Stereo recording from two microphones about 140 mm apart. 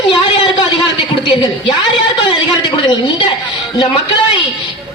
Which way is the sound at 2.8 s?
35° left (ahead or behind).